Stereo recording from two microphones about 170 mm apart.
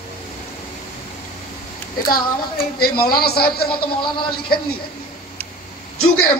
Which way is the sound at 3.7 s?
30° left (ahead or behind).